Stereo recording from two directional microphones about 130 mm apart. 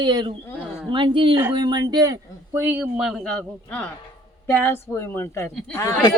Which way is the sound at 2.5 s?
15° right (ahead or behind).